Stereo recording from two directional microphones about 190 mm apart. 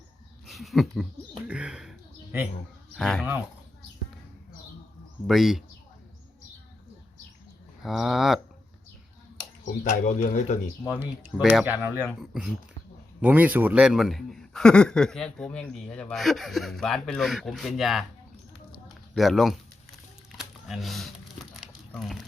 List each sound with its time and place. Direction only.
0.4 s speech: centre (ahead or behind)
1.5 s a sound: 5° right (ahead or behind)
2.9 s a man's voice: 5° left (ahead or behind)
5.2 s a man's voice: centre (ahead or behind)
7.9 s a man's voice: centre (ahead or behind)
9.9 s speech: 45° left (ahead or behind)
11.2 s a man's voice: 10° right (ahead or behind)
18.9 s a sound: centre (ahead or behind)